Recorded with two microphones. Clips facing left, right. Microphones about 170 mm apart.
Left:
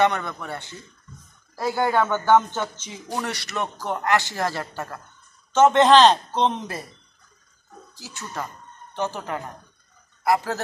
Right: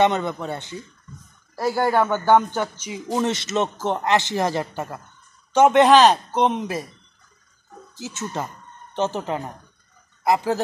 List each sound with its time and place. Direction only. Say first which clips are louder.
0.0 s speech: right 2 dB; 20° right (ahead or behind)
7.9 s speech: right 6 dB; 20° right (ahead or behind)